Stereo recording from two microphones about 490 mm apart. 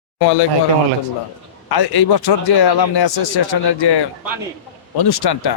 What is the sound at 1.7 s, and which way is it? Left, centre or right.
A man's voice, left.